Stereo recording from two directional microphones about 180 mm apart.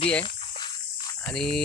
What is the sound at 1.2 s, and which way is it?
Speech, 5° left (ahead or behind).